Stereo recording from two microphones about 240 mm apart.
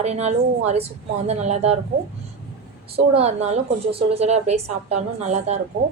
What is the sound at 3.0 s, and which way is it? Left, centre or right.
A woman's voice, right.